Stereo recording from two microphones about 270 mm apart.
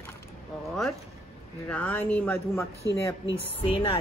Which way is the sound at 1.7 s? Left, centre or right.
Centre.